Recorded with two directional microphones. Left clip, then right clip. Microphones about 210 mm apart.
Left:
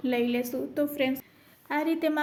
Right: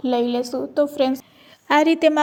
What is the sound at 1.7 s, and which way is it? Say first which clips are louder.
Speech: right 12 dB; 40° right (ahead or behind).